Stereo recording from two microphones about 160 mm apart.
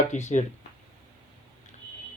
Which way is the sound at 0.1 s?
50° left (ahead or behind).